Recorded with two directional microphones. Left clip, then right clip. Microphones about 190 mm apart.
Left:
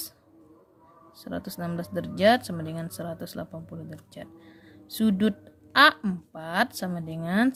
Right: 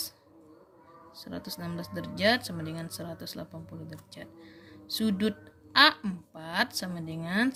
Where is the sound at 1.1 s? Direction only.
55° left (ahead or behind).